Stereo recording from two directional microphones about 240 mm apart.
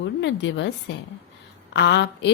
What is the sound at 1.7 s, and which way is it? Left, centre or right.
Speech, left.